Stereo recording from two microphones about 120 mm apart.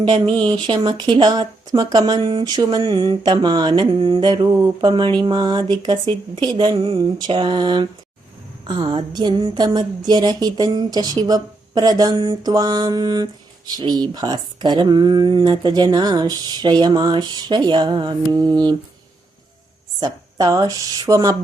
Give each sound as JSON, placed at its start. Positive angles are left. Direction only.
{"t": 0.3, "sound": "speech", "side_deg": -40}
{"t": 20.0, "sound": "speech", "side_deg": -35}